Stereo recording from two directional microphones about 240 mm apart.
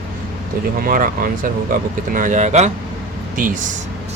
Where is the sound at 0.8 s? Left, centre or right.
Right.